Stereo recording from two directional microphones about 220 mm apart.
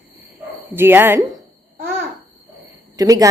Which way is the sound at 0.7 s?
10° right (ahead or behind).